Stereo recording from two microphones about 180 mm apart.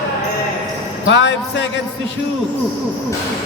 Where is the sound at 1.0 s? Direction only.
80° left.